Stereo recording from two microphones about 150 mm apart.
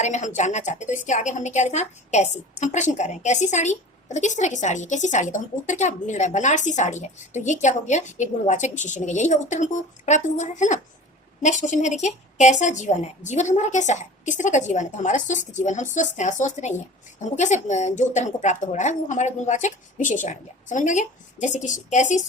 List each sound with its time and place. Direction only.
0.0 s a woman's voice: 50° left (ahead or behind)